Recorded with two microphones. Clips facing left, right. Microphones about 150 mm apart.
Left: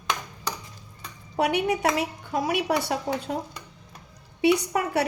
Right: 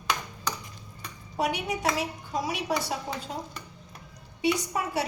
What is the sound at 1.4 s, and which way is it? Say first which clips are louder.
A woman's voice: left 5 dB; 65° left (ahead or behind).